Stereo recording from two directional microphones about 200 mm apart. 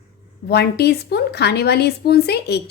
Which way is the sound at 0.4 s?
55° left (ahead or behind).